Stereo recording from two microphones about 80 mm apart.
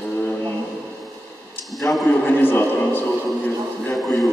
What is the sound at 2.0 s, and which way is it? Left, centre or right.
Speech, left.